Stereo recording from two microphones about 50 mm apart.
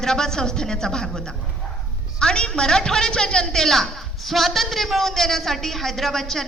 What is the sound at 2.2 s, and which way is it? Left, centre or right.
A woman's voice, centre.